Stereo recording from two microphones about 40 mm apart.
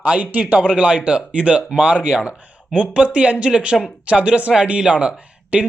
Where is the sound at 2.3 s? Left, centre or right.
Right.